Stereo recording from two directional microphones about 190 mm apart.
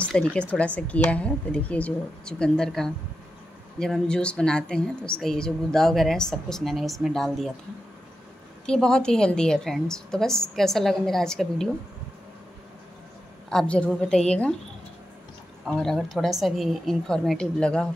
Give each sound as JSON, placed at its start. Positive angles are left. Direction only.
{"t": 0.0, "sound": "a woman's voice", "side_deg": 5}
{"t": 8.6, "sound": "speech", "side_deg": 5}
{"t": 13.5, "sound": "speech", "side_deg": 5}
{"t": 15.6, "sound": "speech", "side_deg": 0}